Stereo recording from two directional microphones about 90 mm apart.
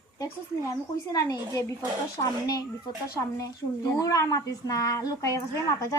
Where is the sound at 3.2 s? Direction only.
40° left (ahead or behind).